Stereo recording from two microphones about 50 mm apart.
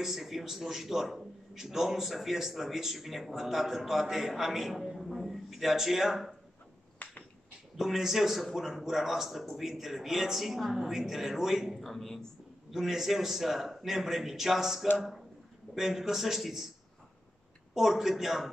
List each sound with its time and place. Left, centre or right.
0.0 s a man's voice: centre
7.0 s a sound: left
7.7 s a man's voice: centre
11.8 s a woman's voice: centre
12.7 s a man's voice: centre
17.7 s a man's voice: centre